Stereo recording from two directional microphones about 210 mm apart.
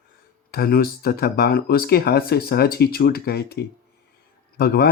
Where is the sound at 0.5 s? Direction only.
45° left (ahead or behind).